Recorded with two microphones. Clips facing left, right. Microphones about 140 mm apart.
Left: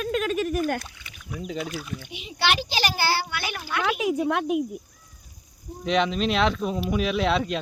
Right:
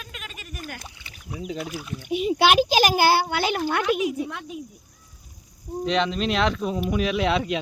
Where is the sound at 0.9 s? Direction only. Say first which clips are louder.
Even; 30° right (ahead or behind).